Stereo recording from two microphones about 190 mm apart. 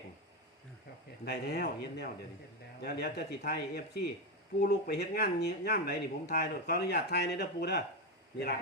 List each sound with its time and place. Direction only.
1.2 s speech: 55° left (ahead or behind)